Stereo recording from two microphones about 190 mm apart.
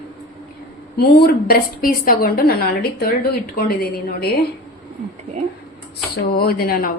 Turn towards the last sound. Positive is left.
turn(degrees=50)  # may be behind; listen again after turning